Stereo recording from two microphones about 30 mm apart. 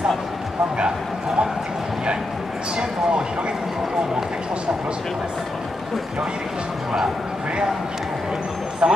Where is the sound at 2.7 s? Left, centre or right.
Right.